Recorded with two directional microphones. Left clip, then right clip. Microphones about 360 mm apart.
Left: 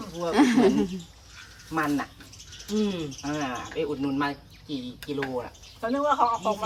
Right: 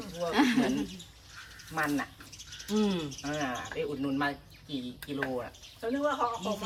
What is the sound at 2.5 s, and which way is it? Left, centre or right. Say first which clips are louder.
Bird: left 2 dB; centre.